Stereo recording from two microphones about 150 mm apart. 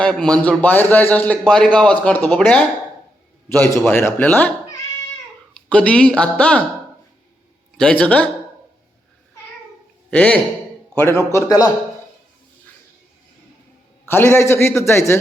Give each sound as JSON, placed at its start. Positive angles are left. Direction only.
{"t": 0.0, "sound": "a man's voice", "side_deg": 5}
{"t": 5.5, "sound": "a man's voice", "side_deg": 10}
{"t": 7.8, "sound": "a man's voice", "side_deg": 10}
{"t": 10.1, "sound": "a man's voice", "side_deg": 10}
{"t": 14.1, "sound": "a man's voice", "side_deg": 15}